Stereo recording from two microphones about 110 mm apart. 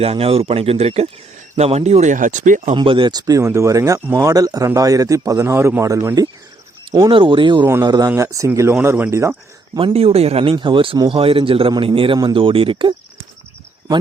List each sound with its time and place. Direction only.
0.0 s speech: 60° right (ahead or behind); by 2.7 s 90° right
2.7 s a man's voice: 50° right (ahead or behind); by 6.1 s 25° right (ahead or behind)
7.1 s speech: 50° right (ahead or behind)
7.9 s a man's voice: 35° right (ahead or behind)
9.7 s speech: 60° right (ahead or behind)
10.5 s speech: 50° right (ahead or behind)